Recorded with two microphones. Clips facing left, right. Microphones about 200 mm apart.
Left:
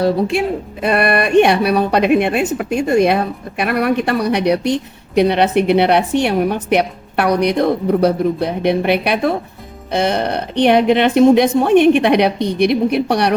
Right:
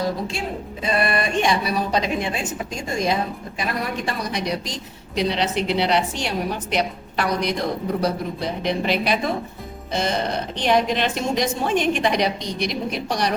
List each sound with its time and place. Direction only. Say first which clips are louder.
0.0 s a woman's voice: left 10 dB; 65° left (ahead or behind)